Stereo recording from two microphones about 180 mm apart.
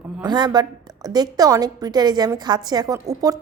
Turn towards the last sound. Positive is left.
turn(degrees=-20)  # may be behind; listen again after turning